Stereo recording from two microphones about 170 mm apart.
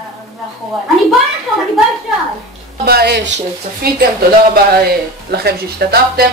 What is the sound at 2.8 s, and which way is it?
Speech, 70° right (ahead or behind).